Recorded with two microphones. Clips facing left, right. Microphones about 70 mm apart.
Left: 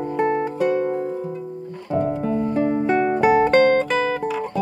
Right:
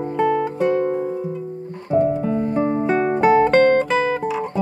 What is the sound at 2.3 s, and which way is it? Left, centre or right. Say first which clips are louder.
Music: right 1 dB; right.